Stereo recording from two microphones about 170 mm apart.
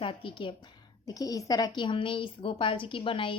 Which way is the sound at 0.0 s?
30° left (ahead or behind).